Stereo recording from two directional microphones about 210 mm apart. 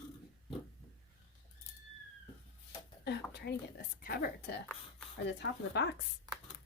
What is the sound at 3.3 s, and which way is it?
A woman's voice, 50° left (ahead or behind).